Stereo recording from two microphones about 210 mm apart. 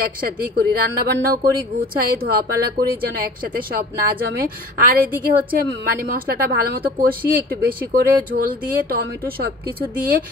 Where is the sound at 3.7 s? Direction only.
45° right (ahead or behind).